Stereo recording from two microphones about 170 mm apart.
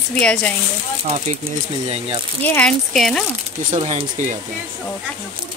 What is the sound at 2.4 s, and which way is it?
Speech, 10° left (ahead or behind).